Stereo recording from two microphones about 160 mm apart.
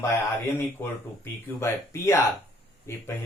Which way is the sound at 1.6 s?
15° left (ahead or behind).